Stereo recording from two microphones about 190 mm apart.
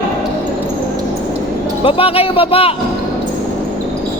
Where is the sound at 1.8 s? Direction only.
30° left (ahead or behind).